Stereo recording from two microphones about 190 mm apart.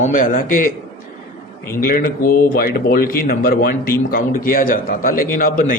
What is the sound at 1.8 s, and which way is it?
A man's voice, 50° left (ahead or behind).